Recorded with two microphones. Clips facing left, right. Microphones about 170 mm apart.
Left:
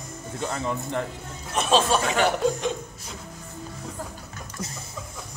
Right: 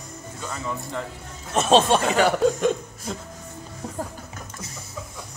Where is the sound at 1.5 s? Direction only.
40° right (ahead or behind).